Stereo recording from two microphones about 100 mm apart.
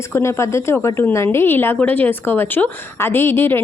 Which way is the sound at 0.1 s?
30° left (ahead or behind).